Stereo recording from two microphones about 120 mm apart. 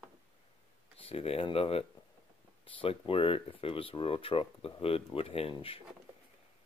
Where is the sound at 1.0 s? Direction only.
55° left (ahead or behind).